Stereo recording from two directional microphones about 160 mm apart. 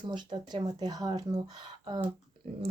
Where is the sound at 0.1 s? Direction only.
25° right (ahead or behind).